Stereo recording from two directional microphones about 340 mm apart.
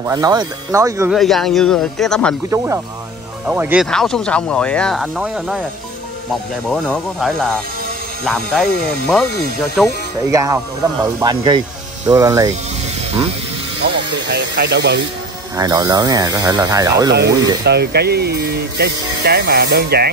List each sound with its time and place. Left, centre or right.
0.0 s speech: centre
2.5 s speech: centre
13.8 s speech: right
15.5 s speech: centre
17.6 s speech: right